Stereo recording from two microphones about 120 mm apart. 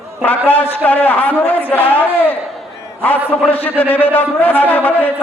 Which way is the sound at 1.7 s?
15° left (ahead or behind).